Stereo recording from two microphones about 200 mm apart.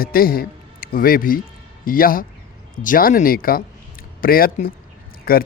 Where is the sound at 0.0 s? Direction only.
45° left (ahead or behind).